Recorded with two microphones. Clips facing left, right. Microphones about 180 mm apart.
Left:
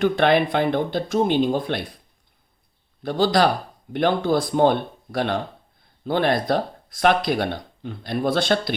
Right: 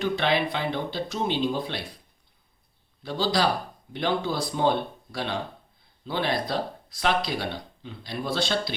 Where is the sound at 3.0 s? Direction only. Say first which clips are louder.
Left 6 dB; 55° left (ahead or behind).